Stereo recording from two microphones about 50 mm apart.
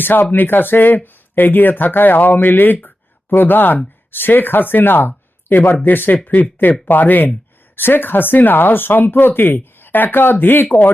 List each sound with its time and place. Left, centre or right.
0.0 s speech: left
2.8 s a sound: left
4.1 s speech: left